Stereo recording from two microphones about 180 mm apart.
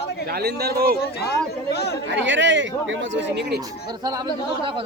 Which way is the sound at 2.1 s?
90° right.